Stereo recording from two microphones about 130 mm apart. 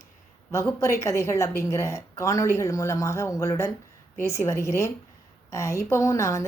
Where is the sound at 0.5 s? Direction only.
20° left (ahead or behind).